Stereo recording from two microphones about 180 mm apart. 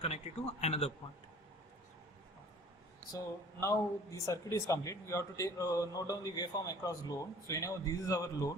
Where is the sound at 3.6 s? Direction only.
15° left (ahead or behind).